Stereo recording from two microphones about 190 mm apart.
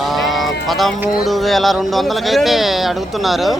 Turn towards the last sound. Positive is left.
turn(degrees=0)  # may be behind; listen again after turning